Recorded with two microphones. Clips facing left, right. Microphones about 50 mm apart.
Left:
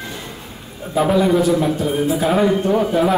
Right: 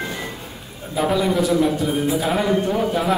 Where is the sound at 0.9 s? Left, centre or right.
Centre.